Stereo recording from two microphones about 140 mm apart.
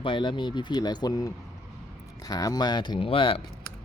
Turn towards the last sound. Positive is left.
turn(degrees=40)  # may be behind; listen again after turning